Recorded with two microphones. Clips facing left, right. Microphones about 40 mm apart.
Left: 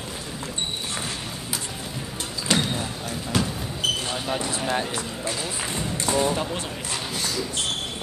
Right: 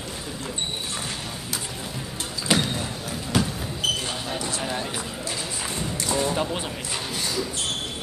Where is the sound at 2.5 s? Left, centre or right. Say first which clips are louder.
Even; centre.